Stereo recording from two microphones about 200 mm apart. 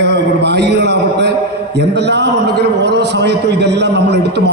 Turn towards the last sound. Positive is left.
turn(degrees=-60)  # may be behind; listen again after turning